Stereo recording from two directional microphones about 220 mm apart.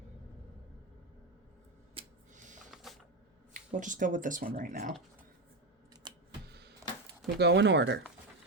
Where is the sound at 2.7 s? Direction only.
Centre (ahead or behind).